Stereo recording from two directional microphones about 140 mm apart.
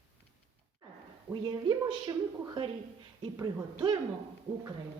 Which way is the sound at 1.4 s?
30° right (ahead or behind).